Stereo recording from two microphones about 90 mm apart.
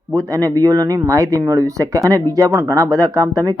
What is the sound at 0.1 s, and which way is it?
Speech, 40° right (ahead or behind).